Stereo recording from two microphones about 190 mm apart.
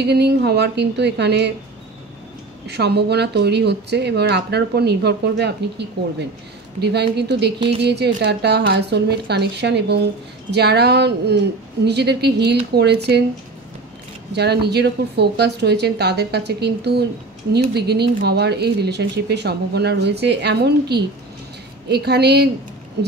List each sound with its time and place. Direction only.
0.0 s speech: 60° right (ahead or behind)
2.6 s speech: 60° right (ahead or behind)
14.3 s speech: 60° right (ahead or behind)